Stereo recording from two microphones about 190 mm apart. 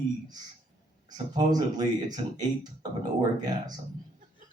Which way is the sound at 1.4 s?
20° right (ahead or behind).